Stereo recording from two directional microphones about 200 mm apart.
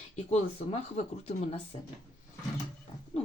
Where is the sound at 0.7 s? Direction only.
35° left (ahead or behind).